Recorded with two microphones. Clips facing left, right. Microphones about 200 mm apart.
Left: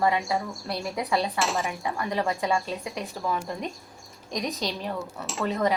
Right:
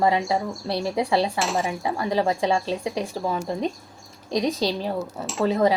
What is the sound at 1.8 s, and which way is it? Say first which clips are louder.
A woman's voice: right 5 dB; 30° right (ahead or behind).